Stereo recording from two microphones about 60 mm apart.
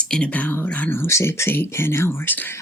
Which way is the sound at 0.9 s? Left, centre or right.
Left.